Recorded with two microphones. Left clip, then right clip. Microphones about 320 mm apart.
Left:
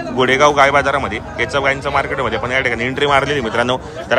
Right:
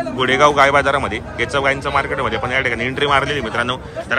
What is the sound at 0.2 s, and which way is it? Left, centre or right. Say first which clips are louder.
A man's voice: left 1 dB; centre.